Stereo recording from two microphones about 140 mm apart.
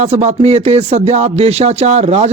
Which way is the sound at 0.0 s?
50° right (ahead or behind).